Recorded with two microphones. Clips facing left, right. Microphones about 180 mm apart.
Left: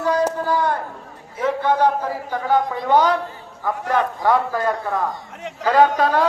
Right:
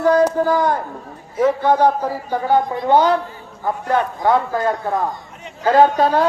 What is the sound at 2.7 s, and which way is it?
Speech, 25° right (ahead or behind).